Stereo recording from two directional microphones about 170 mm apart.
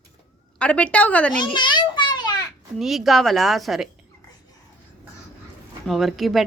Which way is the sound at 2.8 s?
Centre (ahead or behind).